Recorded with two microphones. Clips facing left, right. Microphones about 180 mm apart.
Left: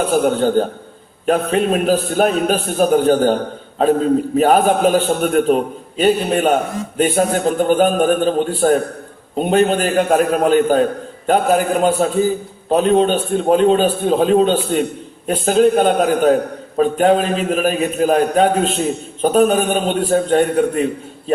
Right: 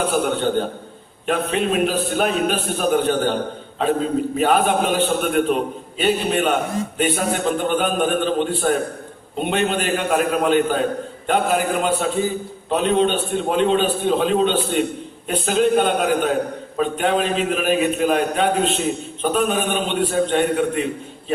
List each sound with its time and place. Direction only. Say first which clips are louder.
1.3 s a man's voice: left 5 dB; 40° left (ahead or behind)
4.4 s a man's voice: left 4 dB; 40° left (ahead or behind)
21.3 s a sound: left 6 dB; 40° left (ahead or behind)